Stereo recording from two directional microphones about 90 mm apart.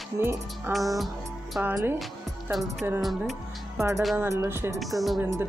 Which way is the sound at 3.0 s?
Centre (ahead or behind).